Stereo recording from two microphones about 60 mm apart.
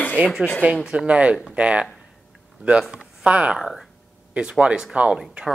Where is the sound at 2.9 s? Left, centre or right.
Right.